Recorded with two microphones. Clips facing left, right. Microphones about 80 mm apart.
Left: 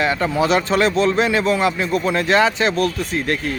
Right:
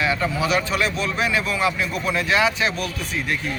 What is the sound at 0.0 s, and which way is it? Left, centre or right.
Speech, left.